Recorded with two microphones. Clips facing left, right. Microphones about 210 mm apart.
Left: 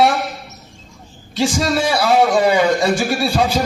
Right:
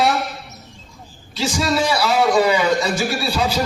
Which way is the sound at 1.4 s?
55° left (ahead or behind).